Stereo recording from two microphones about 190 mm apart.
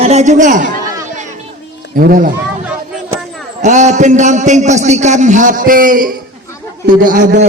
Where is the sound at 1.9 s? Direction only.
50° right (ahead or behind).